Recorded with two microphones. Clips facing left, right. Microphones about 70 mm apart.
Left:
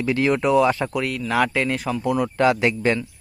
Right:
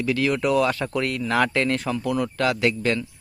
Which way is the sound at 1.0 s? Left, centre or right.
Centre.